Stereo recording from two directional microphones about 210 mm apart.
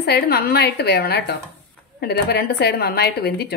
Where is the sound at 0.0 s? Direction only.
50° left (ahead or behind).